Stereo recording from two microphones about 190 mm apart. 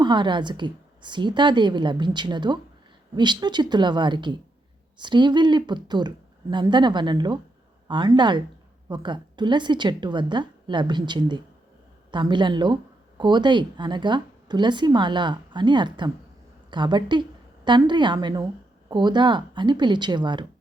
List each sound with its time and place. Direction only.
0.0 s speech: 25° right (ahead or behind)